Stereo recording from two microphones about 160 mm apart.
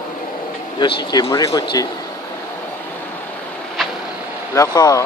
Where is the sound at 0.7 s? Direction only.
25° left (ahead or behind).